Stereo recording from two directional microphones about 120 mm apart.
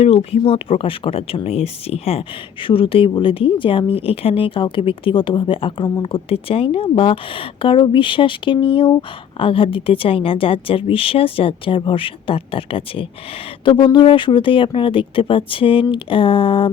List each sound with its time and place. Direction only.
0.0 s speech: 55° left (ahead or behind)